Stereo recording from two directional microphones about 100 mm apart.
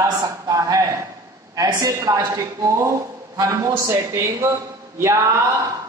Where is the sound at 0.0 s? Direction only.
35° right (ahead or behind).